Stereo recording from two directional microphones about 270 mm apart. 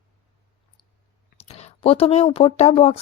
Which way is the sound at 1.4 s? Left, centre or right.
Left.